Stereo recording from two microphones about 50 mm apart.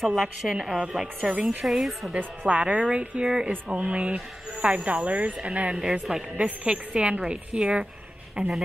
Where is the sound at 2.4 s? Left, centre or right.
Right.